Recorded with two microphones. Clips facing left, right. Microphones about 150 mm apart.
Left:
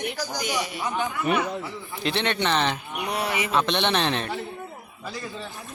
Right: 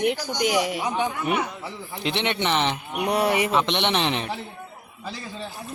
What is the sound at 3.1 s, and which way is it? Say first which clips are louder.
Speech: right 6 dB; 55° right (ahead or behind).